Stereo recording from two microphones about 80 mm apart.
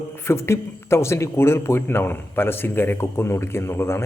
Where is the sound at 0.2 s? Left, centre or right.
Left.